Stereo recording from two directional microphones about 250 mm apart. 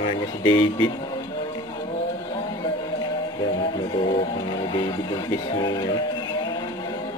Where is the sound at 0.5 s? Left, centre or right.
Centre.